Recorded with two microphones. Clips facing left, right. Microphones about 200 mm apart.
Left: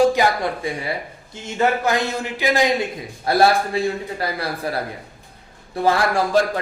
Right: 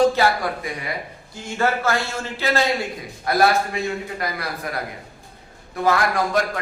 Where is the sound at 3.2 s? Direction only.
30° left (ahead or behind).